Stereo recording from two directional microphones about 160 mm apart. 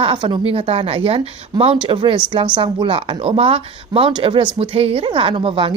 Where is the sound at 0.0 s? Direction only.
30° right (ahead or behind).